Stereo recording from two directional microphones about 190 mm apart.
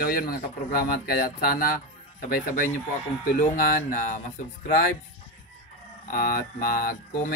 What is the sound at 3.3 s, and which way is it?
Speech, 45° left (ahead or behind).